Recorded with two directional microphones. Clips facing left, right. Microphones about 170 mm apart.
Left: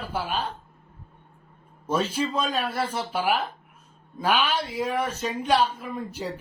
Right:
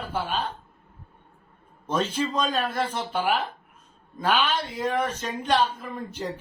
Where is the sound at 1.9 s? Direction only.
10° left (ahead or behind).